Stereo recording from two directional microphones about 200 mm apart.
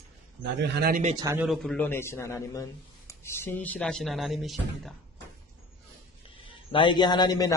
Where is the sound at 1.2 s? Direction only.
10° right (ahead or behind).